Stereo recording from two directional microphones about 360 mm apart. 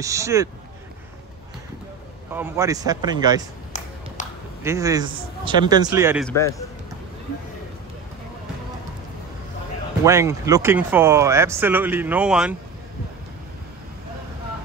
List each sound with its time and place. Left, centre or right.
0.0 s speech: centre
2.3 s speech: centre
4.2 s a sound: left
4.6 s speech: centre
10.0 s speech: centre